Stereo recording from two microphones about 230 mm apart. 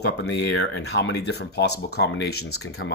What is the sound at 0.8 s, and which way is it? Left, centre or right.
Speech, left.